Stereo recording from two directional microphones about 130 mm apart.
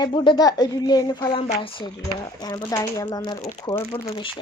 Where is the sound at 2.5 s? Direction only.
20° left (ahead or behind); by 4.4 s 40° left (ahead or behind).